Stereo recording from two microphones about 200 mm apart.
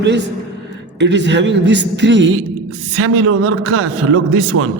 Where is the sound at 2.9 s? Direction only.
90° right.